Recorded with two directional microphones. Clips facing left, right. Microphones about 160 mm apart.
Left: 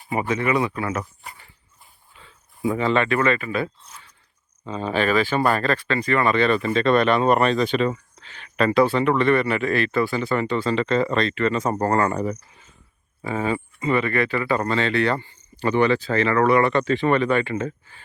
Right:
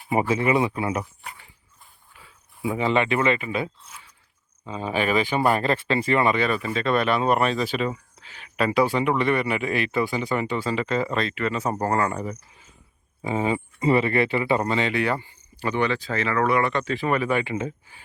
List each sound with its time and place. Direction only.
0.1 s speech: 25° right (ahead or behind)
2.2 s speech: 10° right (ahead or behind); by 6.3 s 25° right (ahead or behind)
6.3 s speech: 10° right (ahead or behind)
13.2 s speech: 20° right (ahead or behind)
13.7 s speech: 30° right (ahead or behind); by 15.7 s 5° right (ahead or behind)
15.7 s speech: 40° left (ahead or behind)
17.0 s speech: 10° right (ahead or behind)